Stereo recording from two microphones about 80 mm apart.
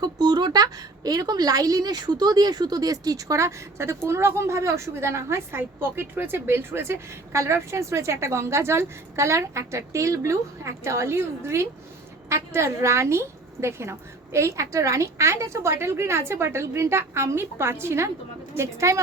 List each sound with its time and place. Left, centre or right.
0.0 s a woman's voice: right